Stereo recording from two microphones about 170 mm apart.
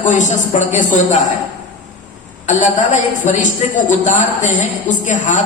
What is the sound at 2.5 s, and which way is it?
Music, 45° left (ahead or behind).